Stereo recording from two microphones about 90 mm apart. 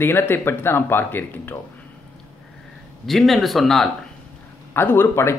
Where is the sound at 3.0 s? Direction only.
Centre (ahead or behind).